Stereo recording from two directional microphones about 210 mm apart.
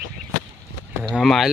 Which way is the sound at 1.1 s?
Centre (ahead or behind).